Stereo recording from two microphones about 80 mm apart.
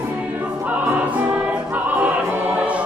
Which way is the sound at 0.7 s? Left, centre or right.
Centre.